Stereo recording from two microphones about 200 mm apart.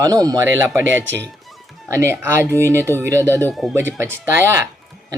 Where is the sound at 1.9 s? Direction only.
15° right (ahead or behind).